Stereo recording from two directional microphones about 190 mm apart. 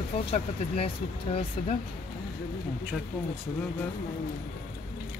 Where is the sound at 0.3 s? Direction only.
30° left (ahead or behind).